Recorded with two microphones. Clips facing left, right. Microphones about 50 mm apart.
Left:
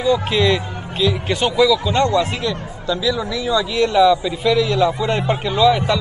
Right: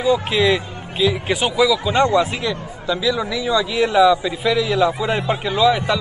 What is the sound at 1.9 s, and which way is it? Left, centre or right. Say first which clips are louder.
Speech: right 1 dB; right.